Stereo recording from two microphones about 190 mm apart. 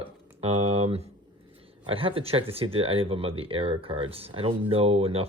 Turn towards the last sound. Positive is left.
turn(degrees=-30)  # may be behind; listen again after turning